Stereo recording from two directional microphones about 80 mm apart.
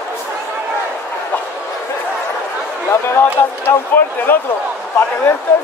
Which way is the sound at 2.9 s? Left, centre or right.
Left.